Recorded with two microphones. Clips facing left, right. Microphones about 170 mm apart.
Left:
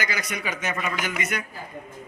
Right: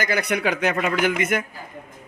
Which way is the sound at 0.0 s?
60° right (ahead or behind).